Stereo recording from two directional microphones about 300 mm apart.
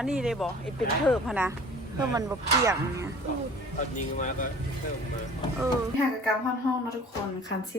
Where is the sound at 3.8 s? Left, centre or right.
Left.